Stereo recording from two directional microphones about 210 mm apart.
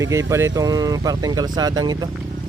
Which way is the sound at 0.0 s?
15° right (ahead or behind).